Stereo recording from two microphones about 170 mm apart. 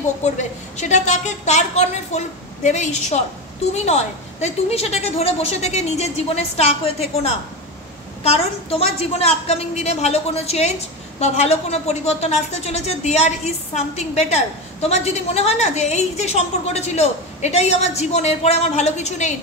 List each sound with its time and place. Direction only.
0.2 s a woman's voice: 45° left (ahead or behind)